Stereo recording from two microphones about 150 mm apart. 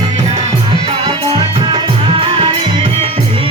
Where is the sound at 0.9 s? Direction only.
35° right (ahead or behind).